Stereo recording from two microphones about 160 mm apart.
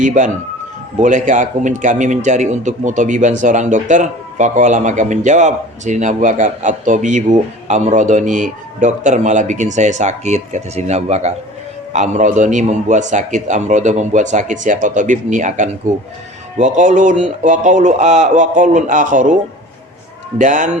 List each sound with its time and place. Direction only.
0.0 s a man's voice: 50° right (ahead or behind)
20.4 s a man's voice: 50° right (ahead or behind)